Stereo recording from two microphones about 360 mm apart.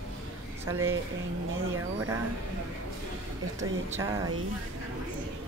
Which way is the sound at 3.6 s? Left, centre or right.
Centre.